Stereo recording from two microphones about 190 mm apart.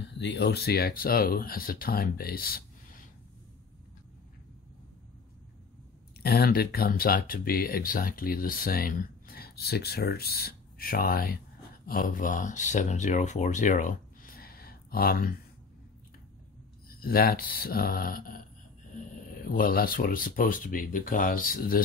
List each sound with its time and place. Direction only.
0.2 s speech: 65° left (ahead or behind); by 3.1 s 50° left (ahead or behind)
6.2 s speech: 55° left (ahead or behind)
16.9 s speech: 50° left (ahead or behind)